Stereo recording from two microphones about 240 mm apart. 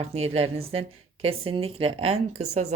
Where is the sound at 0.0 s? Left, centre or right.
Right.